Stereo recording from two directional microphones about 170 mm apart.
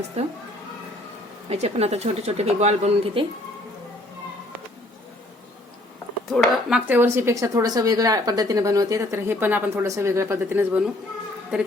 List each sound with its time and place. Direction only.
1.5 s speech: 40° right (ahead or behind)
6.3 s speech: centre (ahead or behind)